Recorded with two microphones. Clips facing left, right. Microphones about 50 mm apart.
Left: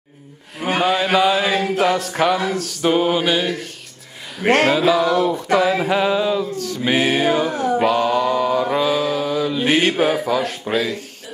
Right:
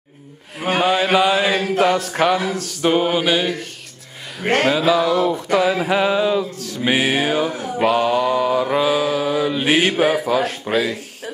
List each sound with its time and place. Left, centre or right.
0.6 s mantra: centre
4.6 s mantra: centre